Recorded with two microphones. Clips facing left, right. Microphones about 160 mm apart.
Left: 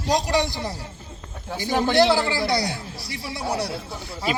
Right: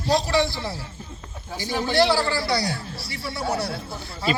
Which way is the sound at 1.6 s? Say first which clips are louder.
Left 2 dB; 50° left (ahead or behind).